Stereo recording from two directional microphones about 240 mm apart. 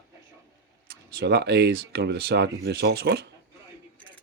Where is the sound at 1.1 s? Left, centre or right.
Right.